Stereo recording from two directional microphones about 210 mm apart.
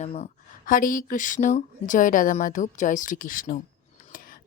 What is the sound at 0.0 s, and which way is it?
Speech, 30° left (ahead or behind).